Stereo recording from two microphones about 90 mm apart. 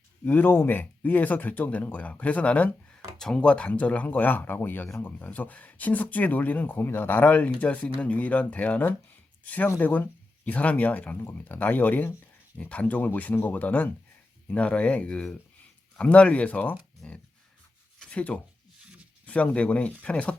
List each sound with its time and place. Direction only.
0.3 s speech: 20° left (ahead or behind)
18.0 s a sound: 15° left (ahead or behind)
19.2 s speech: 15° left (ahead or behind)